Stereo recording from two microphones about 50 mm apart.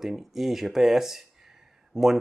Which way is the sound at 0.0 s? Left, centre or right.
Centre.